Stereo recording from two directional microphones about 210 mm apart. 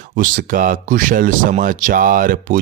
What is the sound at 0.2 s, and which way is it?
Speech, 40° right (ahead or behind).